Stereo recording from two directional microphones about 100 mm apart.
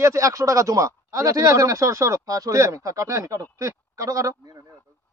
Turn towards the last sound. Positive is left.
turn(degrees=-35)  # may be behind; listen again after turning